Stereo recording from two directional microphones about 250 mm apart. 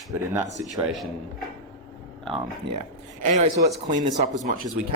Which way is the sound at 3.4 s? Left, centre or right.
Right.